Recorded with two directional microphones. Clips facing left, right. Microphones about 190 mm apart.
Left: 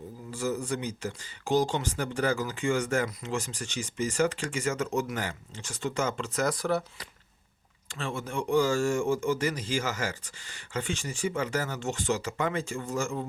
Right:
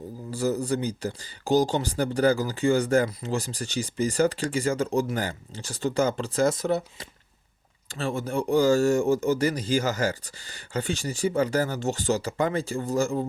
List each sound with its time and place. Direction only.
0.3 s speech: 35° right (ahead or behind); by 7.1 s 20° right (ahead or behind)
7.9 s speech: 35° right (ahead or behind)